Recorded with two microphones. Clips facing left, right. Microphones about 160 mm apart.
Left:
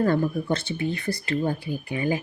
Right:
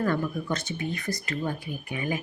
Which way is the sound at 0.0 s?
30° left (ahead or behind).